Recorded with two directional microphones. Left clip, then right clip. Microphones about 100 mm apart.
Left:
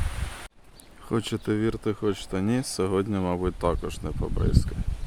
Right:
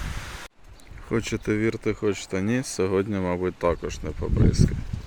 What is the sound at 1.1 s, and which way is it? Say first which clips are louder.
Speech: right 2 dB; 10° left (ahead or behind).